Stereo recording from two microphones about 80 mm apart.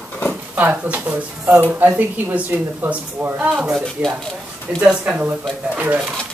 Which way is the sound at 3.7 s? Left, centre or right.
Centre.